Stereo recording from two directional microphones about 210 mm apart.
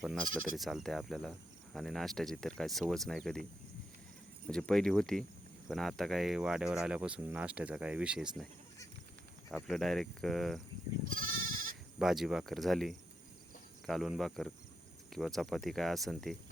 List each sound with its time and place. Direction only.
0.0 s speech: centre (ahead or behind)
4.4 s speech: 5° left (ahead or behind)
9.5 s speech: centre (ahead or behind)
11.3 s goat: 70° right (ahead or behind)
11.9 s speech: centre (ahead or behind)